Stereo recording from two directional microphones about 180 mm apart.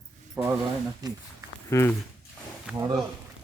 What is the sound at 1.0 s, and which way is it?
Speech, 20° right (ahead or behind).